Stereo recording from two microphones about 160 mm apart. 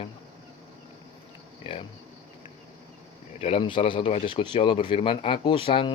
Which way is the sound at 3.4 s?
40° left (ahead or behind).